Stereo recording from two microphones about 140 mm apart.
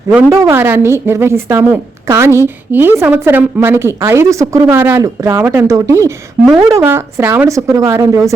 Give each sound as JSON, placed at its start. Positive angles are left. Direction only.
{"t": 0.3, "sound": "a woman's voice", "side_deg": -20}